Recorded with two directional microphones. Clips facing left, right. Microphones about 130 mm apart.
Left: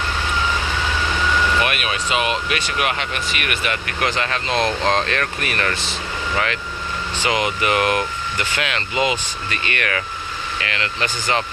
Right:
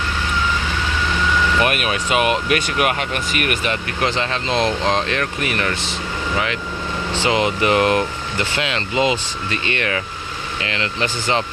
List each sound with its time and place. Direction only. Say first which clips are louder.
1.6 s speech: right 3 dB; 45° right (ahead or behind); by 6.0 s 20° right (ahead or behind)
7.1 s speech: right 3 dB; 30° right (ahead or behind)